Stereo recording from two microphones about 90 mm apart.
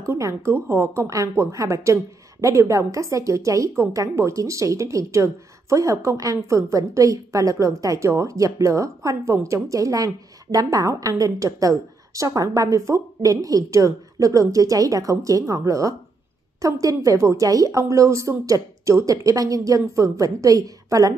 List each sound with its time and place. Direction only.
0.0 s a woman's voice: 35° right (ahead or behind)